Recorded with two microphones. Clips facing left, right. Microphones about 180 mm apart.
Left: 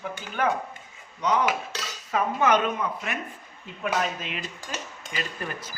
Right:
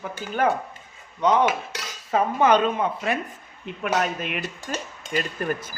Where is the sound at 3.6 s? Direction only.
60° right (ahead or behind).